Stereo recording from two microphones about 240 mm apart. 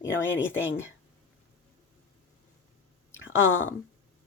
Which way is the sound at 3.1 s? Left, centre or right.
Left.